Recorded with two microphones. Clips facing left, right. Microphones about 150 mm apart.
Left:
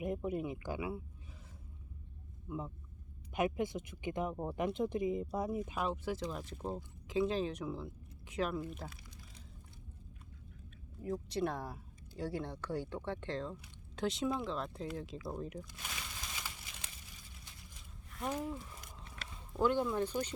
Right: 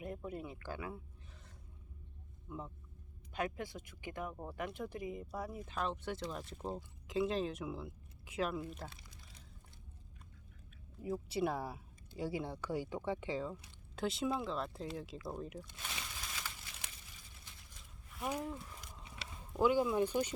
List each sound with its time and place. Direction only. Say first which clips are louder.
0.0 s speech: left 7 dB; 20° left (ahead or behind)
2.5 s speech: left 4 dB; 5° left (ahead or behind)
3.3 s speech: left 6 dB; 20° left (ahead or behind)
5.7 s speech: left 2 dB; 5° left (ahead or behind)
11.0 s speech: even; 5° right (ahead or behind)
18.1 s a sound: left 1 dB; 5° right (ahead or behind)